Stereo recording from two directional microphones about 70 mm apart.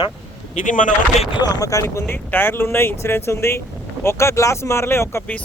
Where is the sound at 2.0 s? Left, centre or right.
Left.